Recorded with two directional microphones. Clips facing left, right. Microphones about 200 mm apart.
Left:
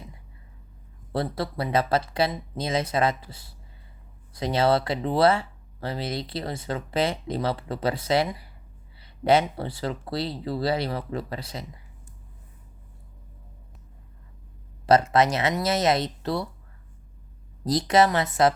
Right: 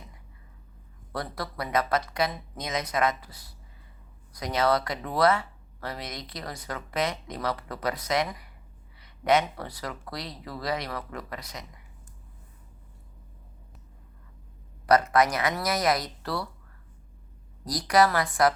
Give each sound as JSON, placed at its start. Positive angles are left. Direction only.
{"t": 1.1, "sound": "speech", "side_deg": 25}
{"t": 14.8, "sound": "speech", "side_deg": 25}
{"t": 17.7, "sound": "speech", "side_deg": 25}